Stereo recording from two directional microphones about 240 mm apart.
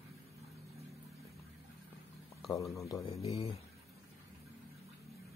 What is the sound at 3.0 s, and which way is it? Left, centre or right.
Speech, left.